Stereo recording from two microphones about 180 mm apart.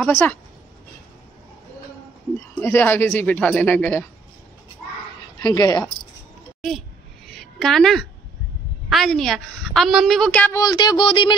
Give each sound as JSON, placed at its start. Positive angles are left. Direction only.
{"t": 0.0, "sound": "speech", "side_deg": 10}
{"t": 2.3, "sound": "speech", "side_deg": 15}
{"t": 5.4, "sound": "speech", "side_deg": 20}
{"t": 7.2, "sound": "a sound", "side_deg": 0}
{"t": 8.8, "sound": "a woman's voice", "side_deg": 0}
{"t": 10.6, "sound": "speech", "side_deg": 25}